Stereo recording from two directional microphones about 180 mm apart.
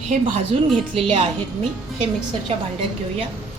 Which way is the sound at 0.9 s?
30° right (ahead or behind).